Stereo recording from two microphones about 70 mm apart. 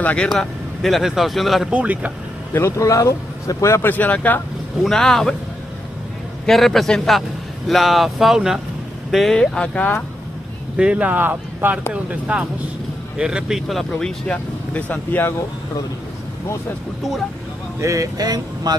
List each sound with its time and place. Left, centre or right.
0.0 s speech: centre
0.3 s a man's voice: centre
1.7 s speech: centre
2.5 s speech: left
3.8 s speech: left
4.8 s a man's voice: centre
6.4 s a man's voice: centre
10.8 s speech: centre
11.9 s speech: centre; by 15.2 s left
17.7 s speech: right